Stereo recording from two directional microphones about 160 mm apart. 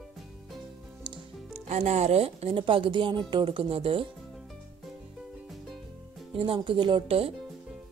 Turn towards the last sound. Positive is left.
turn(degrees=-35)  # may be behind; listen again after turning